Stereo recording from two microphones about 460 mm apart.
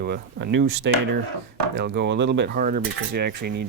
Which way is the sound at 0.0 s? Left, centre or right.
Right.